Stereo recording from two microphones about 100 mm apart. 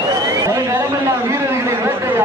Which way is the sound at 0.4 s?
35° right (ahead or behind).